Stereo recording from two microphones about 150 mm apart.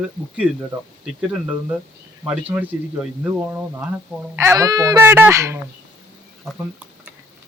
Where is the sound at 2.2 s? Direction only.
10° right (ahead or behind).